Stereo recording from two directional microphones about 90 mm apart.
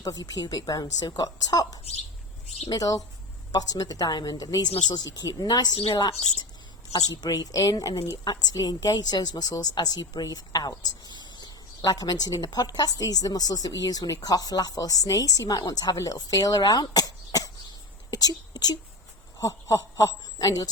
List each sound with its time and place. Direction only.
0.0 s a woman's voice: 45° left (ahead or behind)
18.1 s whispering: 45° left (ahead or behind)
19.4 s speech: 35° left (ahead or behind)